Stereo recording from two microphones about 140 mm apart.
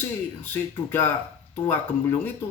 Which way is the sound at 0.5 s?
15° left (ahead or behind).